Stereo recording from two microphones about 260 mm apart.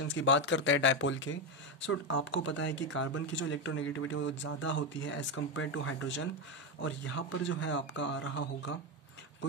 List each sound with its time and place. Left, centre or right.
0.0 s speech: left